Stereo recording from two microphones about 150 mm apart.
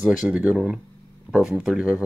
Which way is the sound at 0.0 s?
5° right (ahead or behind).